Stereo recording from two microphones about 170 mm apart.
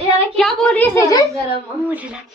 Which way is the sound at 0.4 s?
10° left (ahead or behind).